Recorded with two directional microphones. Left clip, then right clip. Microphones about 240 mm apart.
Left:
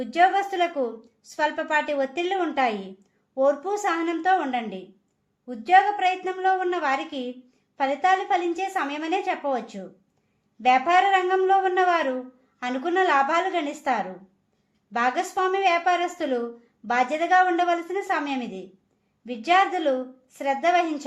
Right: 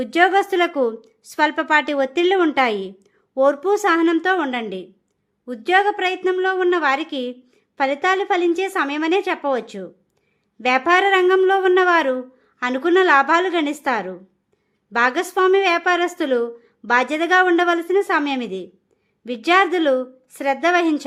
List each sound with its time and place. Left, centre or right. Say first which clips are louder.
0.0 s a woman's voice: right 4 dB; right